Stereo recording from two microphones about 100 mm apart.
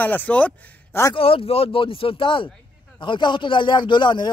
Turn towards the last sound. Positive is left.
turn(degrees=50)  # may be behind; listen again after turning